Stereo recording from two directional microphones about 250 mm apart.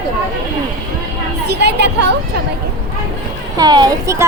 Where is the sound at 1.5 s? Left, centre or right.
Right.